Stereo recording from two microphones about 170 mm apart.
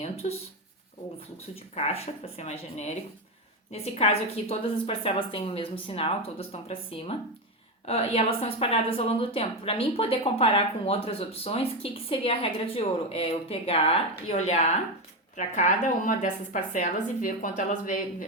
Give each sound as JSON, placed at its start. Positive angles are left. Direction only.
{"t": 0.0, "sound": "a woman's voice", "side_deg": 35}
{"t": 1.7, "sound": "a woman's voice", "side_deg": 35}